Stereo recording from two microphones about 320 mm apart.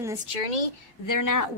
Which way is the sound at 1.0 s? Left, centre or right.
Left.